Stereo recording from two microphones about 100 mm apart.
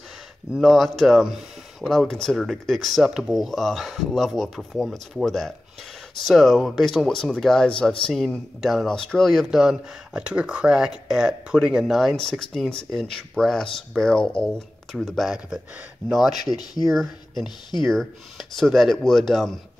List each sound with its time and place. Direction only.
0.6 s speech: centre (ahead or behind)
16.4 s speech: 45° left (ahead or behind)
16.8 s speech: centre (ahead or behind)